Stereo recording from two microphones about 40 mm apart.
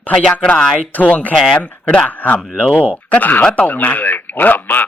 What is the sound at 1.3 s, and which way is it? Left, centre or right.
Speech, centre.